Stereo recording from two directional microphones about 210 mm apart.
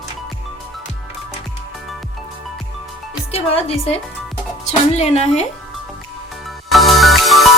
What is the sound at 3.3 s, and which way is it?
Speech, 30° left (ahead or behind).